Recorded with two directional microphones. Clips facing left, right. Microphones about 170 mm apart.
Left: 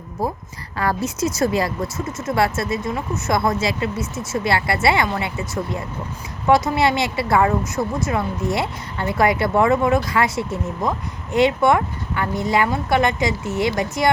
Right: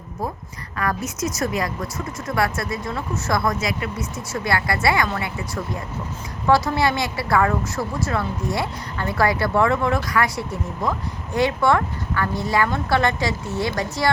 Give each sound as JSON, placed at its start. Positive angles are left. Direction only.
{"t": 0.8, "sound": "speech", "side_deg": 30}
{"t": 6.5, "sound": "speech", "side_deg": 20}